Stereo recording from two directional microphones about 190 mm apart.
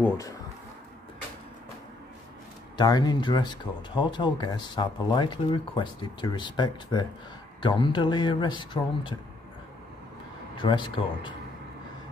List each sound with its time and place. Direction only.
2.8 s speech: 20° left (ahead or behind)
10.5 s speech: 25° left (ahead or behind)